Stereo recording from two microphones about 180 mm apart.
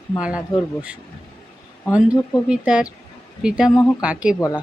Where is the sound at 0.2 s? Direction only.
5° right (ahead or behind).